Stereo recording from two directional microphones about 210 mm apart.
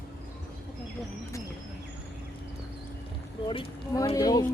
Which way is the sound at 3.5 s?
25° left (ahead or behind).